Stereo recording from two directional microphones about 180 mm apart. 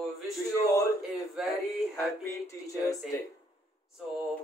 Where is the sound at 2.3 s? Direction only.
20° left (ahead or behind).